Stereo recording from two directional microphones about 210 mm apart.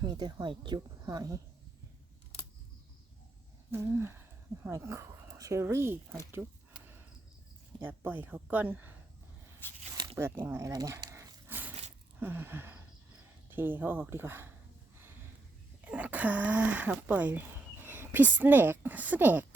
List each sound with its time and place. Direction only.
0.0 s speech: 20° right (ahead or behind)
3.7 s speech: 10° right (ahead or behind)
7.8 s speech: 10° right (ahead or behind)
9.6 s speech: 10° left (ahead or behind)
10.2 s dog: 10° right (ahead or behind)
12.2 s speech: 10° right (ahead or behind)
15.8 s speech: 5° right (ahead or behind)